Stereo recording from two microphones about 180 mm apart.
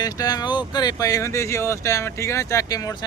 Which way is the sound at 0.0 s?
20° left (ahead or behind).